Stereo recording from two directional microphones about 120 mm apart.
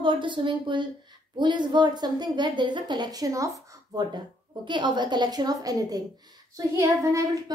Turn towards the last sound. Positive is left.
turn(degrees=-25)  # may be behind; listen again after turning